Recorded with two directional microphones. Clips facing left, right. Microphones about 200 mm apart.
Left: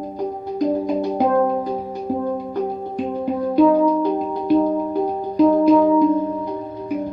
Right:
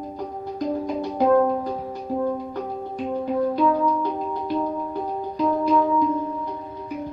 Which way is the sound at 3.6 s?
25° left (ahead or behind).